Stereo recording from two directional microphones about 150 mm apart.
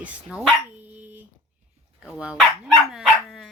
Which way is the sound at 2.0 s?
5° right (ahead or behind).